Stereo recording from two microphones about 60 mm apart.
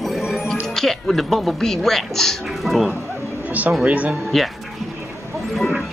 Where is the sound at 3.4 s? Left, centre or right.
Right.